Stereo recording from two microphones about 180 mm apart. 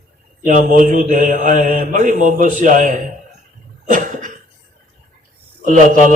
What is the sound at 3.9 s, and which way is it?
Cough, 45° right (ahead or behind).